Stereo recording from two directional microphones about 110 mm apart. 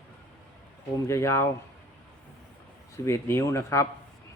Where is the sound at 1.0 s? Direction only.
25° left (ahead or behind).